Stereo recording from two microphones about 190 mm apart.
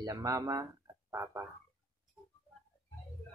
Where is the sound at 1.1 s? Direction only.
10° right (ahead or behind).